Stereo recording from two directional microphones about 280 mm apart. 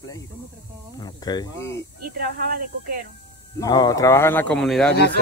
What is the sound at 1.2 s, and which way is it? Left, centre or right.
Speech, centre.